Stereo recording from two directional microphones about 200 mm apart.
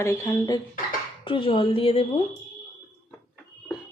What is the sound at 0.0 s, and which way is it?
A woman's voice, 15° left (ahead or behind).